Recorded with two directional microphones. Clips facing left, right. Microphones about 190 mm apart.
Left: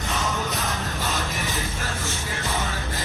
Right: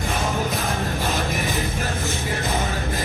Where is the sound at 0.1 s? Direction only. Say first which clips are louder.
Right 1 dB; 35° right (ahead or behind).